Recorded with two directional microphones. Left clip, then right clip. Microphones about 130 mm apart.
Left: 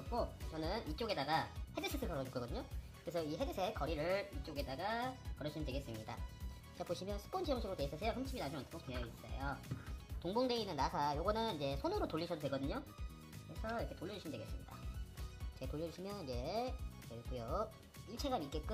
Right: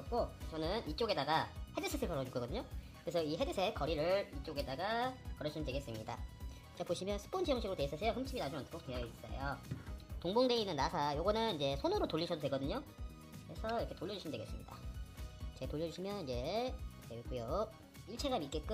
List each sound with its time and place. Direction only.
0.1 s speech: 35° right (ahead or behind)
10.2 s speech: 35° right (ahead or behind)
15.6 s speech: 25° right (ahead or behind)